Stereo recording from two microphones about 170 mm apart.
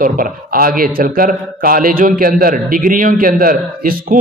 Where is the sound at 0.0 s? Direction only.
55° right (ahead or behind).